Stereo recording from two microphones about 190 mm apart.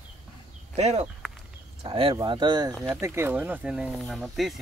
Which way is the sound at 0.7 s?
35° right (ahead or behind).